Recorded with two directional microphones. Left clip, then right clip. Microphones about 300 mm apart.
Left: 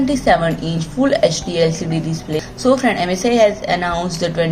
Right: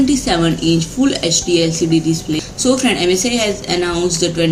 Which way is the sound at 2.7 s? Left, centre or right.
Left.